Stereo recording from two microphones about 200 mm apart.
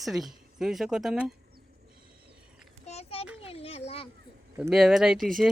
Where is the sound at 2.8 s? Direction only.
30° left (ahead or behind).